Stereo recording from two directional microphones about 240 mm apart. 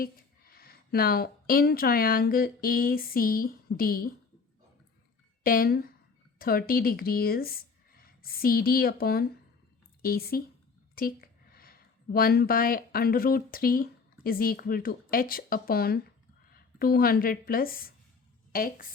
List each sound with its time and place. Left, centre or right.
0.0 s a woman's voice: left
5.4 s a woman's voice: left